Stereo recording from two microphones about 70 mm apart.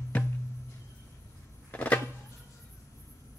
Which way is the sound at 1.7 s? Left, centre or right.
Centre.